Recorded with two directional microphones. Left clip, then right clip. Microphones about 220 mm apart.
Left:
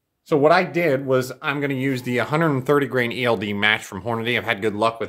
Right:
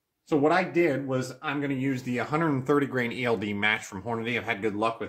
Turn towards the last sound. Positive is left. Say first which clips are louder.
# left 7 dB
turn(degrees=45)  # may be behind; listen again after turning